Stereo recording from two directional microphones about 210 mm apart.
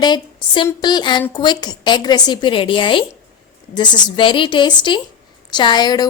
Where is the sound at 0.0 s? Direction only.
20° left (ahead or behind).